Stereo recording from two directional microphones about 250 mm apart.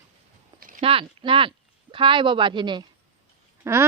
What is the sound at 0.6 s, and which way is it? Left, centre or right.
Speech, right.